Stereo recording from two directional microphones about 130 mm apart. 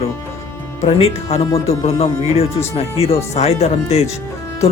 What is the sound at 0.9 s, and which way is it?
Speech, 50° left (ahead or behind).